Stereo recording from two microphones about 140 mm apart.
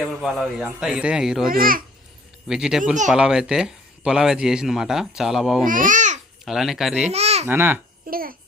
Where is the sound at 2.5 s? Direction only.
5° right (ahead or behind).